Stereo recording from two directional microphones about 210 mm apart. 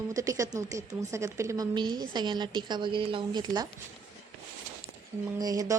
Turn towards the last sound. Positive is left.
turn(degrees=-15)  # may be behind; listen again after turning